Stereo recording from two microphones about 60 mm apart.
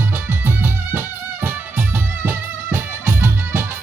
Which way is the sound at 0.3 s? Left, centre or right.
Right.